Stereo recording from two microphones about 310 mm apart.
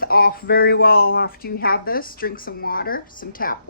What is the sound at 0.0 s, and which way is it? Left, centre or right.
Speech, left.